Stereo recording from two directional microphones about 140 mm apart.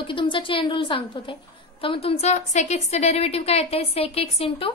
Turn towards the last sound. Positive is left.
turn(degrees=45)  # may be behind; listen again after turning